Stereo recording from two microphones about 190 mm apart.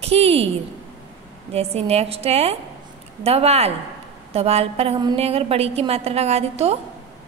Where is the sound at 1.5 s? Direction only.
30° right (ahead or behind).